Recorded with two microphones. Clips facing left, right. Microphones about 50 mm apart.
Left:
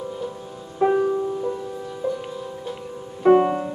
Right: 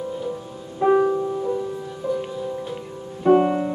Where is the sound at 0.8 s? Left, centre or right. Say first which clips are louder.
Right 1 dB; centre.